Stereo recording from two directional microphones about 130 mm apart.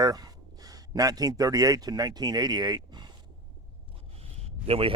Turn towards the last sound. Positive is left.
turn(degrees=-50)  # may be behind; listen again after turning